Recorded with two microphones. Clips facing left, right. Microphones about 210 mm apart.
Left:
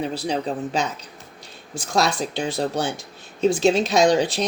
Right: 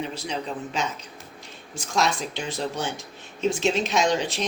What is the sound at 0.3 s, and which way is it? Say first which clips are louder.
Speech: left 6 dB; 35° left (ahead or behind).